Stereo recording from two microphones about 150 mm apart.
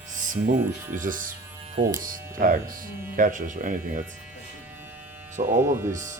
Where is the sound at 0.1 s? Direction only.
60° right (ahead or behind).